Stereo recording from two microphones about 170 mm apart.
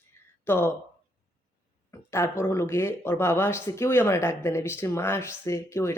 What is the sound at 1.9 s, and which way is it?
Speech, 15° left (ahead or behind).